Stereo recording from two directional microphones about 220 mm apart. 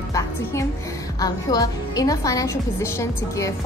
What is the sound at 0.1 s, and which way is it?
Music, 15° left (ahead or behind).